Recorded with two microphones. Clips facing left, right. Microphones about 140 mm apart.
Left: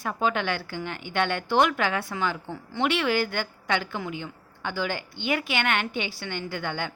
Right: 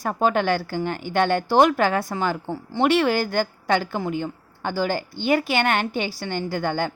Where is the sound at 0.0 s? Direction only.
45° right (ahead or behind).